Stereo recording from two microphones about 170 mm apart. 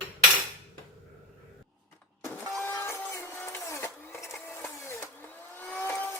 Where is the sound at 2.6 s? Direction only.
15° left (ahead or behind).